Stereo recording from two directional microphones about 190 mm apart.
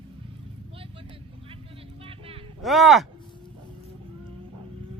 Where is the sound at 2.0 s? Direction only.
30° right (ahead or behind).